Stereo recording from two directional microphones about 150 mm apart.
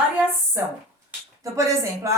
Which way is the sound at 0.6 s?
15° right (ahead or behind).